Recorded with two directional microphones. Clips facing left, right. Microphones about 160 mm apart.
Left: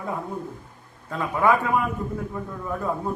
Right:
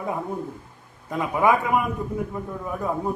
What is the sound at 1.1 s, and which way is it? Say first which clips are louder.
Speech: right 1 dB; 15° right (ahead or behind).